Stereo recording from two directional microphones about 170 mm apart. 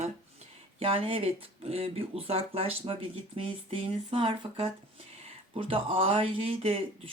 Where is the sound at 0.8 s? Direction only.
35° right (ahead or behind).